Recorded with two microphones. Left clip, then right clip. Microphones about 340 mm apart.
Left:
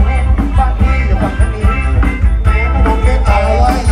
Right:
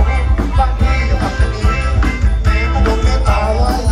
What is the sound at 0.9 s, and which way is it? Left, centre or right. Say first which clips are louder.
Music: left 1 dB; centre.